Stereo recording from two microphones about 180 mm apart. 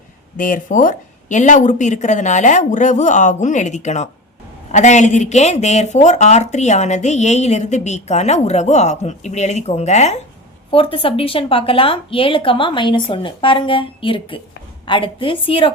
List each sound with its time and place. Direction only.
0.3 s speech: 45° left (ahead or behind); by 15.7 s 30° left (ahead or behind)